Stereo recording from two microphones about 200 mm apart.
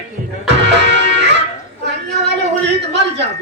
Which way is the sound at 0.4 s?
60° right (ahead or behind).